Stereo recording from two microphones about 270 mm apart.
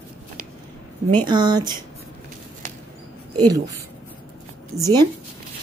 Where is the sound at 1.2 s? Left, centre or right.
Centre.